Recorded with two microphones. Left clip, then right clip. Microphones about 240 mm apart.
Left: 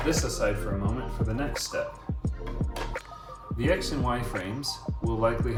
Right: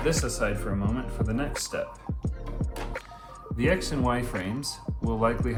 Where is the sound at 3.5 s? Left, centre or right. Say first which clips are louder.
Right 1 dB; right.